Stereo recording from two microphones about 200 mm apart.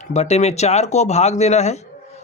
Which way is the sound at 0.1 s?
35° left (ahead or behind).